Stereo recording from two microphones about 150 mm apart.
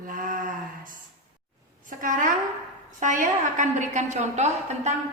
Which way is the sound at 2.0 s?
60° right (ahead or behind).